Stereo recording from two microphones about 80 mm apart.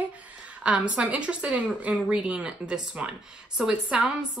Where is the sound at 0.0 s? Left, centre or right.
Centre.